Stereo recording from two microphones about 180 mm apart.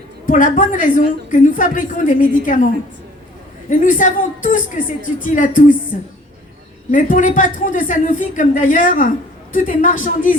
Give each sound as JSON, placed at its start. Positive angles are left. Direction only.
{"t": 0.3, "sound": "speech", "side_deg": 50}
{"t": 3.7, "sound": "speech", "side_deg": 45}
{"t": 6.9, "sound": "speech", "side_deg": 45}